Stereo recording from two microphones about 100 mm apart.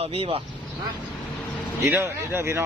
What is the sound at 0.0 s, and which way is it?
Speech, 75° right (ahead or behind).